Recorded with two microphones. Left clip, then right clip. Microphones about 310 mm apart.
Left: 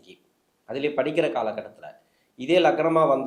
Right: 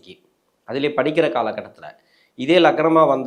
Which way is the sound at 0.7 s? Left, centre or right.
Right.